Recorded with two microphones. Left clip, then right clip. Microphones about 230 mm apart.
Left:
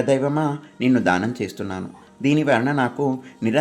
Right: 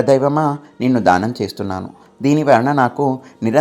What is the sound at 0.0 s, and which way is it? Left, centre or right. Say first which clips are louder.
Speech: right 6 dB; right.